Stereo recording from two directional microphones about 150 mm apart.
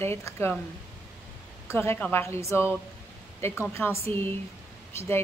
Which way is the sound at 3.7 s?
15° left (ahead or behind).